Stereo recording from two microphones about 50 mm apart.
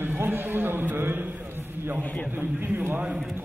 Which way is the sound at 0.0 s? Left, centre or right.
Right.